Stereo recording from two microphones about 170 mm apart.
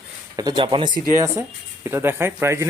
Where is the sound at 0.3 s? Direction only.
25° right (ahead or behind).